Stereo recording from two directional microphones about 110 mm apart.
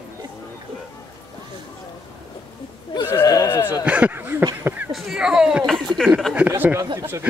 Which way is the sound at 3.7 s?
10° right (ahead or behind).